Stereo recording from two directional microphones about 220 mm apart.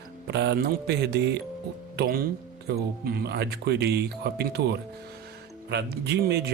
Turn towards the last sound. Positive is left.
turn(degrees=-50)  # may be behind; listen again after turning